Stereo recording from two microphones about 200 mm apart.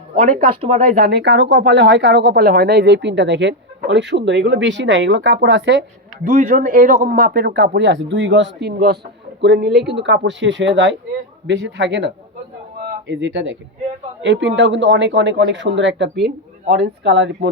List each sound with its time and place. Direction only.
0.2 s speech: 40° right (ahead or behind)
0.9 s speech: 55° right (ahead or behind)
6.2 s speech: 35° right (ahead or behind); by 17.5 s 60° right (ahead or behind)